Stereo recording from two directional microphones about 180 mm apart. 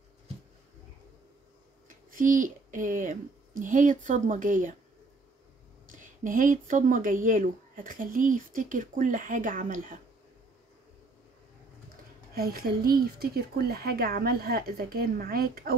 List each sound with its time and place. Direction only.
1.9 s speech: 45° right (ahead or behind)
5.9 s speech: 45° right (ahead or behind)
12.4 s speech: 55° right (ahead or behind)